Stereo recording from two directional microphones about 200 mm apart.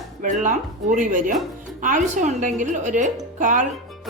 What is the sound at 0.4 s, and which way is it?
A woman's voice, 40° right (ahead or behind).